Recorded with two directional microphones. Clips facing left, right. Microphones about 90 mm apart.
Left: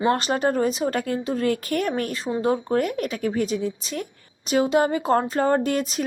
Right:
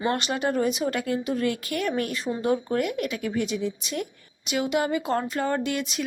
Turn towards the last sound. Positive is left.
turn(degrees=40)  # may be behind; listen again after turning